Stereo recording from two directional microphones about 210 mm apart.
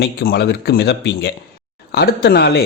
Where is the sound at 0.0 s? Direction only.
50° left (ahead or behind).